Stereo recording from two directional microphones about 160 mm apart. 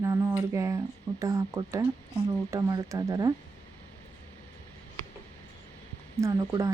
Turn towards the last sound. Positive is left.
turn(degrees=-20)  # may be behind; listen again after turning